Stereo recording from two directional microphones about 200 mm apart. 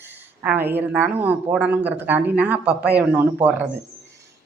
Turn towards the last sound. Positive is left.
turn(degrees=-5)  # may be behind; listen again after turning